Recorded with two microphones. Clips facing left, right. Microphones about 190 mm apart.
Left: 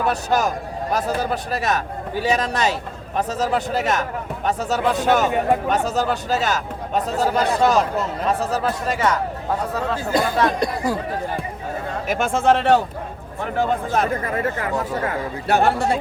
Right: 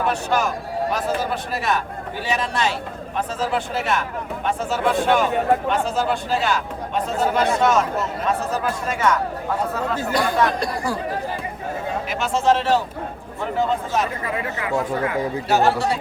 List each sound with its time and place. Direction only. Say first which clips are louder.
0.1 s speech: left 1 dB; 40° left (ahead or behind)
10.1 s speech: left 1 dB; 20° left (ahead or behind)
12.0 s speech: left 2 dB; 50° left (ahead or behind)